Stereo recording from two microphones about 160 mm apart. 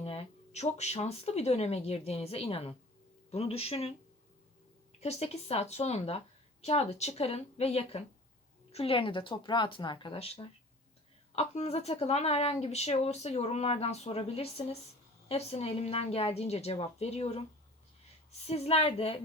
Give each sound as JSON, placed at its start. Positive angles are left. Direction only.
{"t": 0.0, "sound": "speech", "side_deg": 35}